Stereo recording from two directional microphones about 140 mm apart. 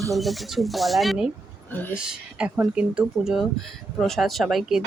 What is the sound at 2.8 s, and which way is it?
Speech, 5° right (ahead or behind).